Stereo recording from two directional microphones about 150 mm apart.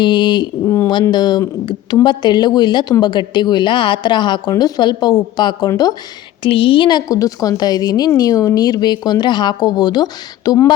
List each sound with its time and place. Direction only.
0.0 s a sound: 30° left (ahead or behind)
0.9 s a woman's voice: 30° left (ahead or behind)
6.4 s a woman's voice: 35° left (ahead or behind)